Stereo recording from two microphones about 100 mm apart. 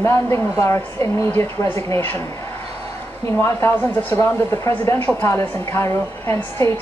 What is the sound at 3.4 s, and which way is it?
Speech, 25° left (ahead or behind).